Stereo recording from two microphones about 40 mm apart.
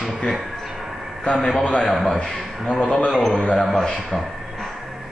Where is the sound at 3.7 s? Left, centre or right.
Centre.